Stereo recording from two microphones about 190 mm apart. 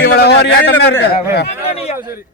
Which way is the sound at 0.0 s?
60° left (ahead or behind).